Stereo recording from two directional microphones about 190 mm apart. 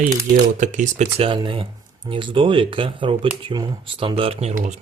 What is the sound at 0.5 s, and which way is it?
Speech, 40° right (ahead or behind).